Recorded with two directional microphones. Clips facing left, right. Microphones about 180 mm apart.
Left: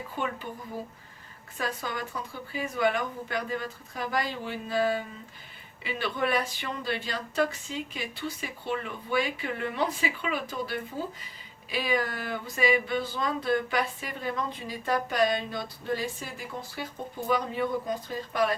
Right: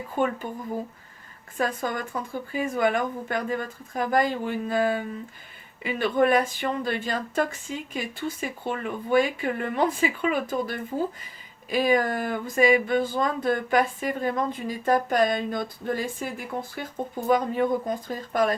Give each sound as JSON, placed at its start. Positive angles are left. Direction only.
{"t": 0.2, "sound": "speech", "side_deg": -45}
{"t": 1.5, "sound": "speech", "side_deg": -50}